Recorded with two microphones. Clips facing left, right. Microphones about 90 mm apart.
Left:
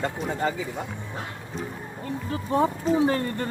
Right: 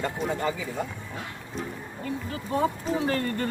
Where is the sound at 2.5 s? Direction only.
25° left (ahead or behind).